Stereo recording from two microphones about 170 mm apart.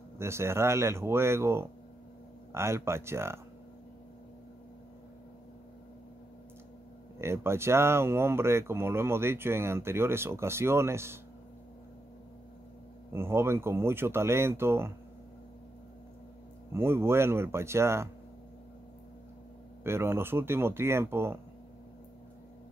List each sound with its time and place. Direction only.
0.2 s speech: 15° right (ahead or behind)
7.2 s speech: 15° right (ahead or behind)
13.1 s speech: 15° right (ahead or behind)
16.7 s speech: 15° right (ahead or behind)
19.8 s speech: 15° right (ahead or behind)